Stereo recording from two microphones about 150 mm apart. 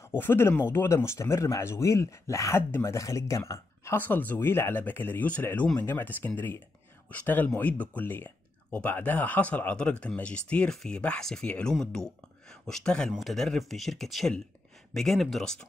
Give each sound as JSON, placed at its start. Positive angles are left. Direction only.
{"t": 0.2, "sound": "speech", "side_deg": 15}